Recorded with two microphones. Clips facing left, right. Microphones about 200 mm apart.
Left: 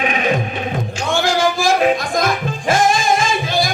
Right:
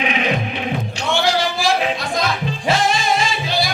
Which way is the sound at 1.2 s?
50° left (ahead or behind).